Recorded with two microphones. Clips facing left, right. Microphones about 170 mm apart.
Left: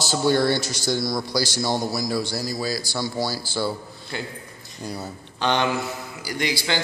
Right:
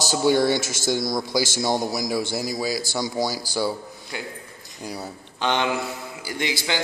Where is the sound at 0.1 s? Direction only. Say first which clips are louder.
Right 1 dB; 15° right (ahead or behind).